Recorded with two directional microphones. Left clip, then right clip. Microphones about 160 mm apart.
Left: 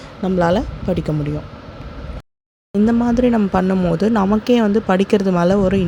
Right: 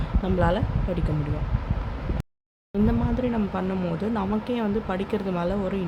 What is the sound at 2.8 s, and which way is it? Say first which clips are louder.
Speech: left 11 dB; 50° left (ahead or behind).